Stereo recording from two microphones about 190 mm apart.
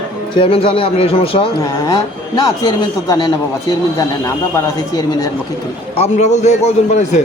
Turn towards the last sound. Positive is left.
turn(degrees=35)  # may be behind; listen again after turning